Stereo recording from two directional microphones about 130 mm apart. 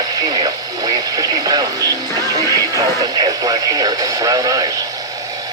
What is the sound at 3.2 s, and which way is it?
Speech, 30° right (ahead or behind).